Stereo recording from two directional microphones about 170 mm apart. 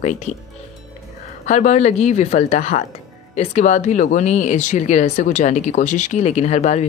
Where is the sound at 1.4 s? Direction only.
40° left (ahead or behind).